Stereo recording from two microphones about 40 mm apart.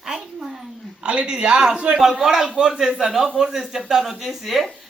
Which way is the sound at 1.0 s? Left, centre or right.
Right.